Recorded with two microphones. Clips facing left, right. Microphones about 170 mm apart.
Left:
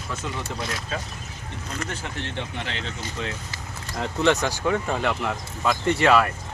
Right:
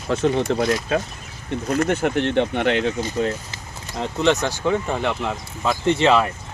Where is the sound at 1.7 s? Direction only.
60° right (ahead or behind).